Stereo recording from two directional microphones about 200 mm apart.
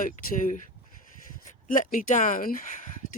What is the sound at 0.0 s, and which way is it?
Speech, 40° left (ahead or behind).